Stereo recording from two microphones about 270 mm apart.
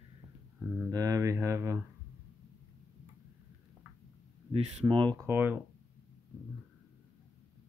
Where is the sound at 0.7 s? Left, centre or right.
Centre.